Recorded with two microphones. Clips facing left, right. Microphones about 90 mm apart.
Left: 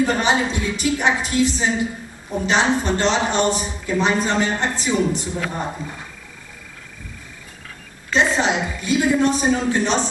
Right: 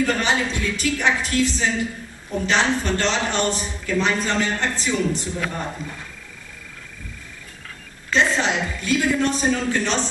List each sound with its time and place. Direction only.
0.0 s a man's voice: 15° left (ahead or behind)
8.1 s a man's voice: 15° left (ahead or behind)